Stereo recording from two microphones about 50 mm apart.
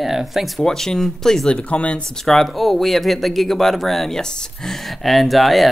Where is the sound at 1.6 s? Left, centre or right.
Left.